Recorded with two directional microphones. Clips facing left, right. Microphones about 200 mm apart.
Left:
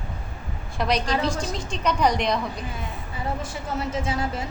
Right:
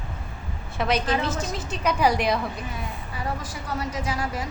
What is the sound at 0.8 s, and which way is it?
A woman's voice, 5° right (ahead or behind).